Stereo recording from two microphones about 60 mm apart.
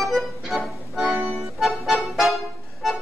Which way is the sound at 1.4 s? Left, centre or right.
Centre.